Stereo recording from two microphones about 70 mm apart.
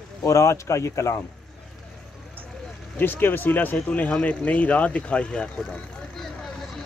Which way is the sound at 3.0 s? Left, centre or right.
Left.